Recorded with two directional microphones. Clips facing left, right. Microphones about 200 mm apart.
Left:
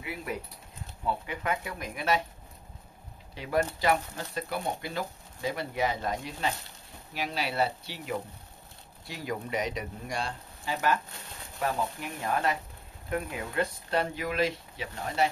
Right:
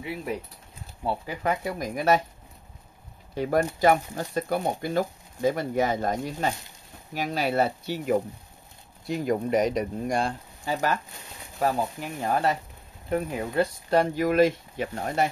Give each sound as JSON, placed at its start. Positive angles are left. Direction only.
{"t": 1.0, "sound": "speech", "side_deg": -35}
{"t": 3.3, "sound": "speech", "side_deg": -45}
{"t": 12.2, "sound": "speech", "side_deg": -35}